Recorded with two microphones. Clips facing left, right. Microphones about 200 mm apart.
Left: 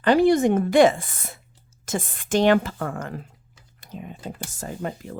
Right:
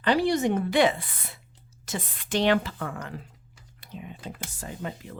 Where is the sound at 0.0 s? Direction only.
50° left (ahead or behind).